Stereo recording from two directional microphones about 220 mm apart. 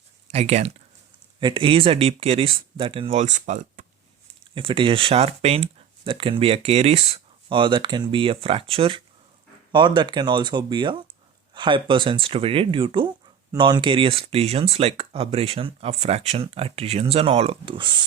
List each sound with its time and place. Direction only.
0.3 s speech: 30° right (ahead or behind)
4.5 s speech: 25° right (ahead or behind)